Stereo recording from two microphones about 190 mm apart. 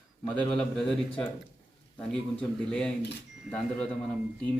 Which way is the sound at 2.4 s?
5° left (ahead or behind).